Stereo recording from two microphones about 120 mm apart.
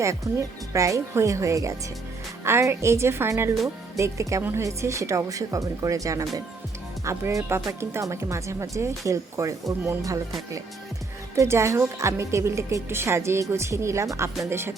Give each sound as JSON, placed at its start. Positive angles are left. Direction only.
{"t": 0.0, "sound": "a woman's voice", "side_deg": -25}